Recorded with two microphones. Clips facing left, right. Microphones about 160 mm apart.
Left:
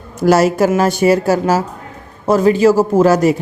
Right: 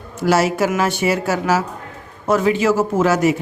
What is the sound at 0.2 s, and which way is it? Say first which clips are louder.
Speech: left 5 dB; 40° left (ahead or behind).